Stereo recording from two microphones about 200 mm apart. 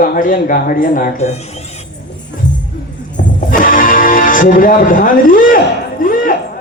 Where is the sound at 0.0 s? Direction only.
45° left (ahead or behind).